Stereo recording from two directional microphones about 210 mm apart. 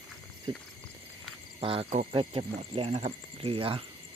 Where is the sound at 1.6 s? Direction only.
25° right (ahead or behind).